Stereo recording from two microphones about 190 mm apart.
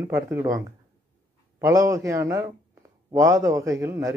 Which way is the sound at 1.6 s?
15° right (ahead or behind).